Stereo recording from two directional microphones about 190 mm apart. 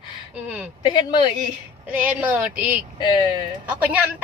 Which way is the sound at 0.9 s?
25° left (ahead or behind).